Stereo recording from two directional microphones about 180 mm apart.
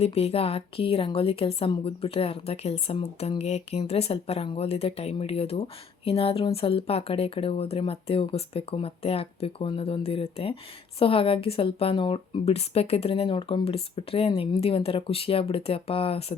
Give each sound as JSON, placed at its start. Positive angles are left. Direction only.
{"t": 0.0, "sound": "a woman's voice", "side_deg": 35}